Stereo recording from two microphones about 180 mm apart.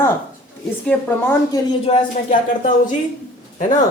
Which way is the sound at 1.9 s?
35° left (ahead or behind).